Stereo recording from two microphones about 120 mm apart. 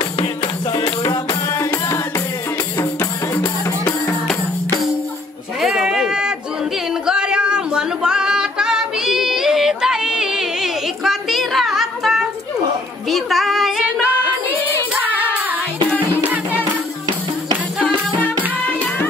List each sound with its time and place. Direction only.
0.2 s music: 40° left (ahead or behind)
1.5 s music: 25° left (ahead or behind)
5.6 s a sound: 5° right (ahead or behind)
7.1 s music: 5° right (ahead or behind)
13.1 s child singing: centre (ahead or behind)